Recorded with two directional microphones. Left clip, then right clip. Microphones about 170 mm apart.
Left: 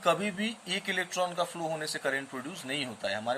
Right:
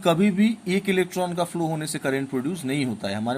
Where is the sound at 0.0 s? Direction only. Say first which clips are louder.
Right 7 dB; 35° right (ahead or behind).